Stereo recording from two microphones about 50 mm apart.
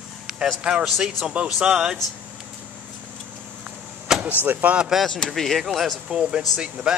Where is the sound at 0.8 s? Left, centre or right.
Centre.